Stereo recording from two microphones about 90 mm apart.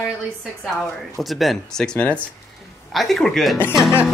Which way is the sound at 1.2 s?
Centre (ahead or behind).